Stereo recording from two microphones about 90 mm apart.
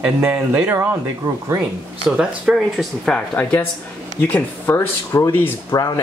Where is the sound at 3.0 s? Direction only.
10° left (ahead or behind).